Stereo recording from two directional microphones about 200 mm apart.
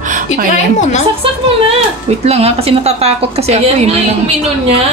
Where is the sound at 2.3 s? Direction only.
30° right (ahead or behind).